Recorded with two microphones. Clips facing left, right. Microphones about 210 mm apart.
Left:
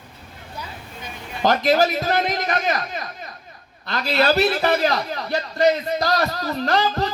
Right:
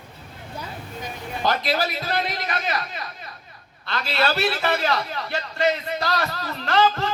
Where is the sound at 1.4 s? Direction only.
45° left (ahead or behind).